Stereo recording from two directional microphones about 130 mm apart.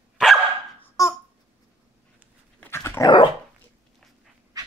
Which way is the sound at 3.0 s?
35° left (ahead or behind).